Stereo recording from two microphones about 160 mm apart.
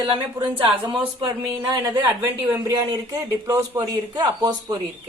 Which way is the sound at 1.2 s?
30° right (ahead or behind).